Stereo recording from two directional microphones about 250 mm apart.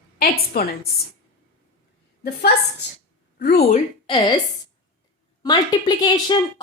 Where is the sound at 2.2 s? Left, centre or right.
Left.